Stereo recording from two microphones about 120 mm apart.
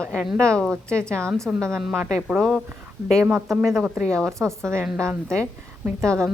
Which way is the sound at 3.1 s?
20° right (ahead or behind).